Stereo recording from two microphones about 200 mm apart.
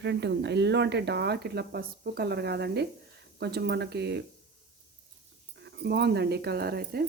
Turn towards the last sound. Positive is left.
turn(degrees=-50)  # may be behind; listen again after turning